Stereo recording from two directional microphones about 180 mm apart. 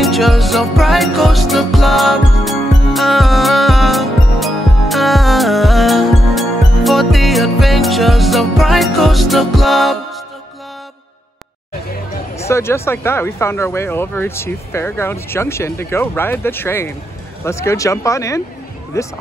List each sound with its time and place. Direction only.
0.0 s music: centre (ahead or behind)
12.4 s speech: 15° left (ahead or behind)